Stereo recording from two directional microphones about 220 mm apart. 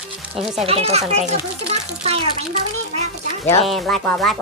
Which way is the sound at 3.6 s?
Centre (ahead or behind).